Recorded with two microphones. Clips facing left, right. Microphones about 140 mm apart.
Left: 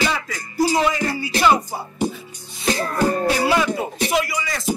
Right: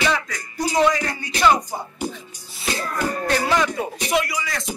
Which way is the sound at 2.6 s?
30° left (ahead or behind).